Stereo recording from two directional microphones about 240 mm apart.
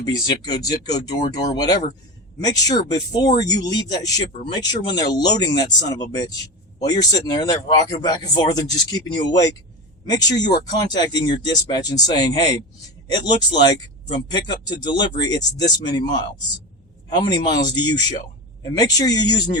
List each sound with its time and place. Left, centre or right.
0.0 s speech: centre